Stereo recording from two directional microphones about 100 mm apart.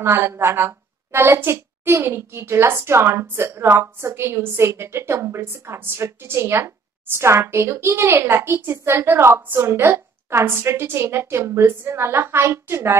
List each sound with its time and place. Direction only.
0.0 s a woman's voice: 25° right (ahead or behind)